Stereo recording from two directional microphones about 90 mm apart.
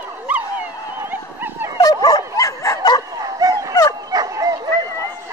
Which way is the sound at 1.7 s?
45° left (ahead or behind).